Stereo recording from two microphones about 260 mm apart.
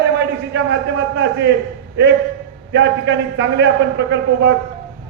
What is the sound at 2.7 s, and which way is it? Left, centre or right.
Speech, right.